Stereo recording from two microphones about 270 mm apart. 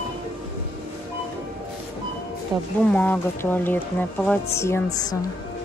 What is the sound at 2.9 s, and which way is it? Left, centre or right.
Speech, centre.